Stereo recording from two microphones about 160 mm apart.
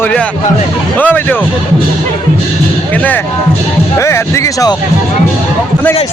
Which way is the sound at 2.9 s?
10° left (ahead or behind).